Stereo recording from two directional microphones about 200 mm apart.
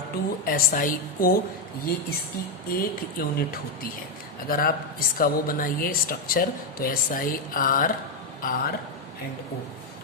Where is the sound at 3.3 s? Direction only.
45° left (ahead or behind).